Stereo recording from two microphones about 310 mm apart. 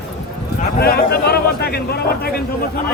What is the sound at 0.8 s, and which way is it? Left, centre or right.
A man's voice, left.